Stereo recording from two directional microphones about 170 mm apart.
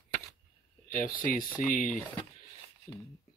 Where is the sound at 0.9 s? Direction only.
55° left (ahead or behind).